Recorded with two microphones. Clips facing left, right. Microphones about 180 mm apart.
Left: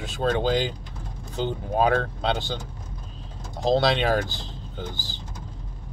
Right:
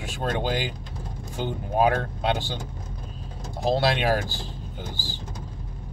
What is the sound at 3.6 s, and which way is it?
Speech, 10° right (ahead or behind).